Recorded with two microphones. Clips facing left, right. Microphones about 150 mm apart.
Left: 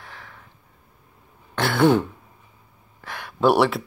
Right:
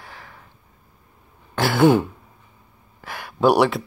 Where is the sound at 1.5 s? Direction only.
Centre (ahead or behind).